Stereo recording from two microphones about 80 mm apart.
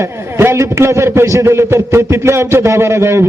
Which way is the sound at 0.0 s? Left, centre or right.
Right.